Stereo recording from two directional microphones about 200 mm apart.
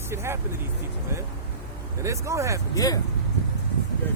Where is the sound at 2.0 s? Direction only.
15° right (ahead or behind).